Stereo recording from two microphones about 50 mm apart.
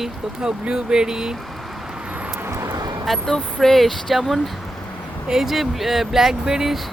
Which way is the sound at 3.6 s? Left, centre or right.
Centre.